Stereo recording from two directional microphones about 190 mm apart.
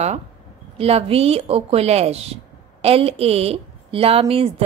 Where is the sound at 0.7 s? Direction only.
30° right (ahead or behind).